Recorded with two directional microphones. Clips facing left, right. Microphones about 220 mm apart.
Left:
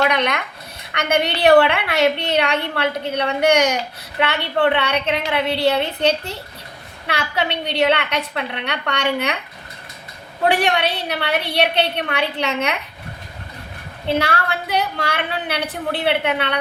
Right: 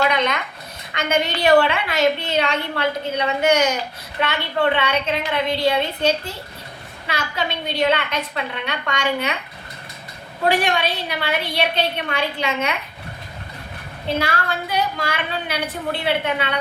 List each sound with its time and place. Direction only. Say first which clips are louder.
0.0 s a woman's voice: left 1 dB; 65° left (ahead or behind)
10.7 s a woman's voice: left 2 dB; 65° left (ahead or behind)
14.1 s a woman's voice: left 2 dB; 65° left (ahead or behind)